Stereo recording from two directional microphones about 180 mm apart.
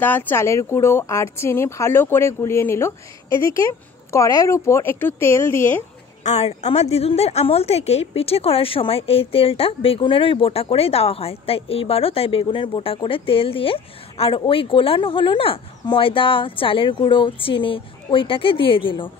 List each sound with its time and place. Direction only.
0.0 s speech: 10° left (ahead or behind)
6.2 s a woman's voice: 40° left (ahead or behind)